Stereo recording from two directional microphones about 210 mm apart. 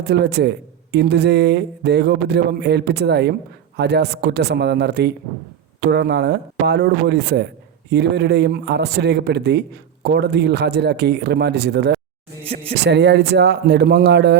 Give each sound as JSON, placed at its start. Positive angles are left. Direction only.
{"t": 0.0, "sound": "a man's voice", "side_deg": -50}